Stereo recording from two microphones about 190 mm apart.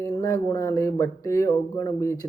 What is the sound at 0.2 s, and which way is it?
Speech, 15° left (ahead or behind).